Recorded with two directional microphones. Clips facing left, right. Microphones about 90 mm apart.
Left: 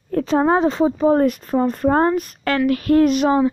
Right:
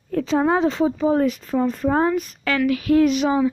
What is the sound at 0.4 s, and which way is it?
Speech, 40° left (ahead or behind).